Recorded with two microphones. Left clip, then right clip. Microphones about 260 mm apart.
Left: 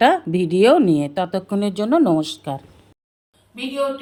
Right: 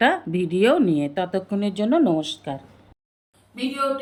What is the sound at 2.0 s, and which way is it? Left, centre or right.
Speech, left.